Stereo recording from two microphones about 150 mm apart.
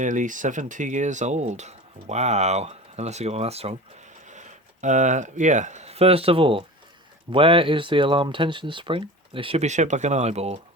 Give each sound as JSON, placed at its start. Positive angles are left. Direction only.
{"t": 0.0, "sound": "speech", "side_deg": -55}
{"t": 4.3, "sound": "speech", "side_deg": -55}